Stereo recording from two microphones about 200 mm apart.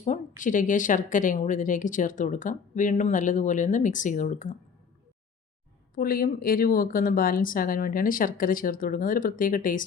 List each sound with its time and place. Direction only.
0.0 s speech: 40° left (ahead or behind)
6.0 s speech: 45° left (ahead or behind)